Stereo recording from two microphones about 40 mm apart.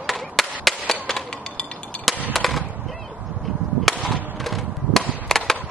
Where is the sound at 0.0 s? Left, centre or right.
Centre.